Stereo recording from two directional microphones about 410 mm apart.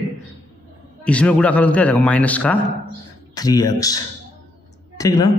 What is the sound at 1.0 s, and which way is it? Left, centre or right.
A man's voice, centre.